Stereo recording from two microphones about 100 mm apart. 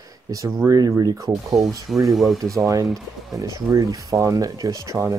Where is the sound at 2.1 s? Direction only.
Centre (ahead or behind).